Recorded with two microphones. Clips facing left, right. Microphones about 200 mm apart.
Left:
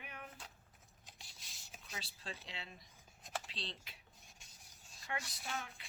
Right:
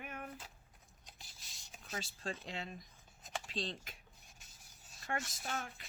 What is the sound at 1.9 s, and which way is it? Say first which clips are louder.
Speech: right 7 dB; 45° right (ahead or behind).